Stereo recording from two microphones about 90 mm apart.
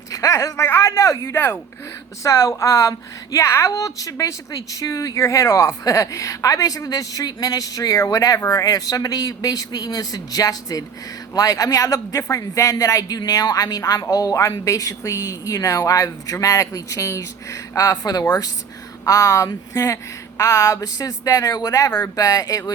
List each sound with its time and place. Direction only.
0.1 s a woman's voice: 40° left (ahead or behind)